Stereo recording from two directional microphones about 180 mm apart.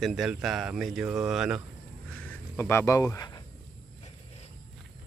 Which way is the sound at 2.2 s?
15° left (ahead or behind).